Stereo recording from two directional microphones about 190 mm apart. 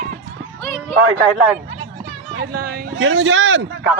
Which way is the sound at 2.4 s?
55° right (ahead or behind).